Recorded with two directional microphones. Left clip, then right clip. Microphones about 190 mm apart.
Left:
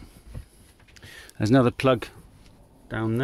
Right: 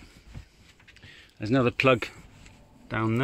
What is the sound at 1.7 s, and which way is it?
Speech, 10° left (ahead or behind).